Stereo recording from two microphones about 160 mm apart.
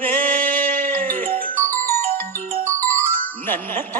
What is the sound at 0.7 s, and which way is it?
Music, 60° right (ahead or behind).